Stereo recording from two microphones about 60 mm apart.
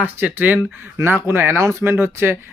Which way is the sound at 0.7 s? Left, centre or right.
Right.